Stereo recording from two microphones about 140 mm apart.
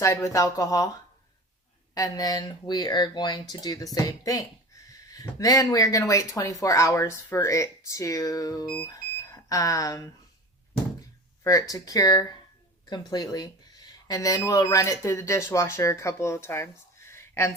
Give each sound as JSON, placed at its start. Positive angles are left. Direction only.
{"t": 0.0, "sound": "speech", "side_deg": 20}
{"t": 2.0, "sound": "speech", "side_deg": 25}
{"t": 11.4, "sound": "speech", "side_deg": 25}
{"t": 17.1, "sound": "a sound", "side_deg": 20}